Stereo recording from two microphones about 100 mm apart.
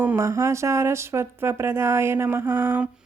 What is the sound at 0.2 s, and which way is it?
Speech, 30° right (ahead or behind).